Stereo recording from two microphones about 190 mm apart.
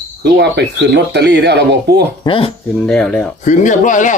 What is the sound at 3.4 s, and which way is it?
Speech, 40° left (ahead or behind).